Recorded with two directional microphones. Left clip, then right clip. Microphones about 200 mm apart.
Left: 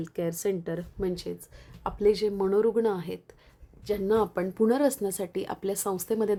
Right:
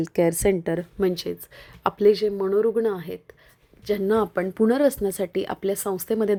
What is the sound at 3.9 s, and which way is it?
Speech, 15° right (ahead or behind).